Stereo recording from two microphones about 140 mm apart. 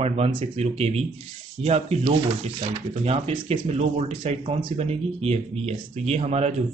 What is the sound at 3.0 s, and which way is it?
Speech, 45° right (ahead or behind).